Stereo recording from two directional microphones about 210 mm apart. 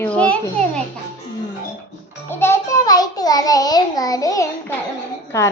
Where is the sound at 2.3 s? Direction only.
10° left (ahead or behind).